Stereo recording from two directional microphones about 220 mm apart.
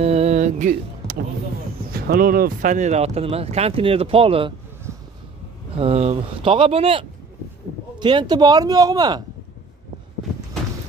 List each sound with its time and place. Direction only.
0.0 s a sound: 30° right (ahead or behind)
1.9 s speech: 45° right (ahead or behind); by 4.6 s 25° right (ahead or behind)
5.8 s speech: 25° right (ahead or behind)